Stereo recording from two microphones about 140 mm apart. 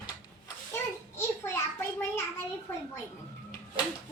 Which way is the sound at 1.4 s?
15° left (ahead or behind).